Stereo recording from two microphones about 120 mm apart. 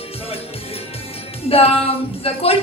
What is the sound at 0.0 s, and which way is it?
Music, 55° left (ahead or behind).